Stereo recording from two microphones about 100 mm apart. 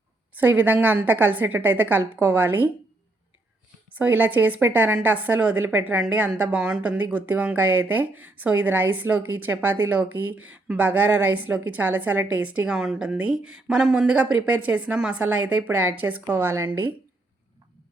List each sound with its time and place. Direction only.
0.3 s speech: 15° right (ahead or behind)
3.9 s speech: 15° right (ahead or behind)